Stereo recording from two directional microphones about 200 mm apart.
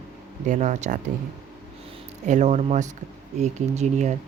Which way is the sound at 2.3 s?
35° right (ahead or behind).